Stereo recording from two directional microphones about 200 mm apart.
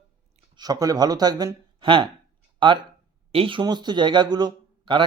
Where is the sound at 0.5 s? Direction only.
20° right (ahead or behind).